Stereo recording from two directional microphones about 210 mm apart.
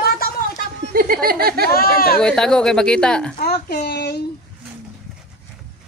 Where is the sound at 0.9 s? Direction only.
45° right (ahead or behind).